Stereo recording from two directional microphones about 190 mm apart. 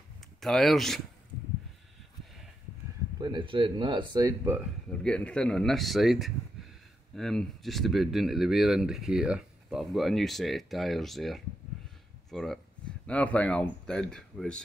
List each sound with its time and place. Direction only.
0.4 s speech: centre (ahead or behind)
3.2 s speech: 25° right (ahead or behind)
5.0 s speech: 5° left (ahead or behind)